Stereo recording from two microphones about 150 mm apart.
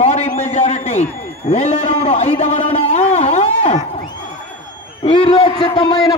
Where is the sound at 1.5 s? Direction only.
55° left (ahead or behind).